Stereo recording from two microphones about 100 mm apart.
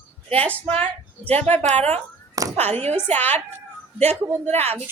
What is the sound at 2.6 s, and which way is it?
Speech, 90° right.